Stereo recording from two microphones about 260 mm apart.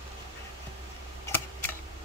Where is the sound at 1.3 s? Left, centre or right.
Centre.